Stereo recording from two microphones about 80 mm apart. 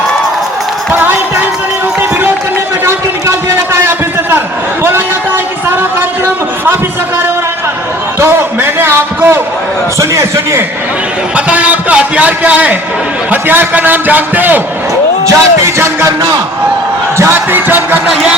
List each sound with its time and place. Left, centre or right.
0.9 s music: right
2.8 s a sound: right
8.2 s a man's voice: right
11.3 s a man's voice: centre
15.3 s speech: right
17.2 s a man's voice: right
18.1 s a man's voice: centre